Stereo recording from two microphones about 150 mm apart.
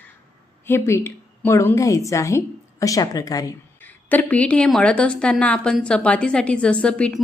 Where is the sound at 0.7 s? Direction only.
15° left (ahead or behind).